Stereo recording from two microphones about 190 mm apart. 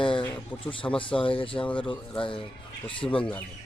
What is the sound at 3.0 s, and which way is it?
Speech, 15° left (ahead or behind).